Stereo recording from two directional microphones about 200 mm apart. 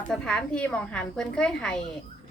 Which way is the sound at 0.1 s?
5° left (ahead or behind).